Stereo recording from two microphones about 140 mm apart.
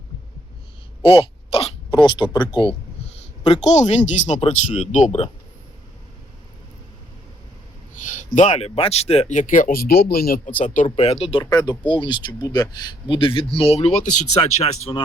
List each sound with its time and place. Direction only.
1.0 s a sound: 40° left (ahead or behind)
2.0 s speech: 35° left (ahead or behind)
3.6 s speech: 55° left (ahead or behind)
8.4 s speech: 50° left (ahead or behind); by 10.8 s 65° left (ahead or behind)
10.8 s speech: 50° left (ahead or behind)
11.4 s speech: 30° left (ahead or behind); by 14.9 s 55° left (ahead or behind)